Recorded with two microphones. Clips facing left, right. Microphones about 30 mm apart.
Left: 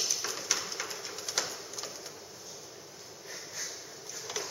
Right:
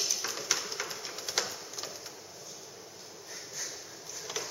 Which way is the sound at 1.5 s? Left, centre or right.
Centre.